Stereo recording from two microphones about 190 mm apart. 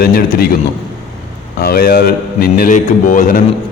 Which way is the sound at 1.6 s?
50° left (ahead or behind).